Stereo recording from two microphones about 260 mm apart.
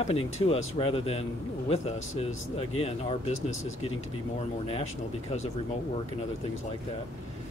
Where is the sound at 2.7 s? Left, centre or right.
Left.